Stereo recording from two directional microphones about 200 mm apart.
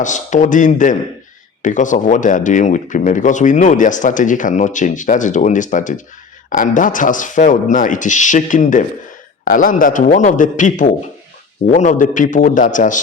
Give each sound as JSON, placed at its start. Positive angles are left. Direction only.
{"t": 0.0, "sound": "speech", "side_deg": 40}